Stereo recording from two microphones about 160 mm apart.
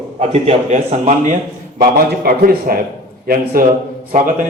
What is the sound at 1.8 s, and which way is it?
A man's voice, 75° right (ahead or behind).